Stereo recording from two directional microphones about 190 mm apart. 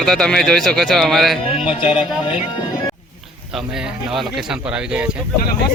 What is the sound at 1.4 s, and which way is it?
Speech, 30° left (ahead or behind).